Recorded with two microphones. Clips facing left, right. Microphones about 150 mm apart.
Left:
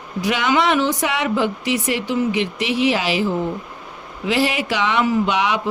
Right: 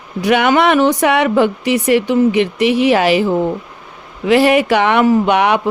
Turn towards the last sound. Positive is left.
turn(degrees=-60)  # may be behind; listen again after turning